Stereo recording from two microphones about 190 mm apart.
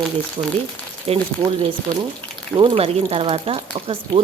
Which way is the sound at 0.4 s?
25° right (ahead or behind).